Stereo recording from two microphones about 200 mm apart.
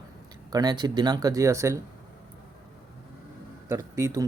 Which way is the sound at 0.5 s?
20° right (ahead or behind).